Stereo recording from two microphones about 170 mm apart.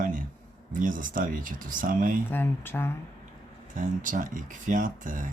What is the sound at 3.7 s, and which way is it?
Speech, 50° right (ahead or behind).